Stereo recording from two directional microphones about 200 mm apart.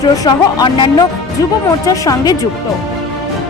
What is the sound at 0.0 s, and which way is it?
Speech, 20° left (ahead or behind).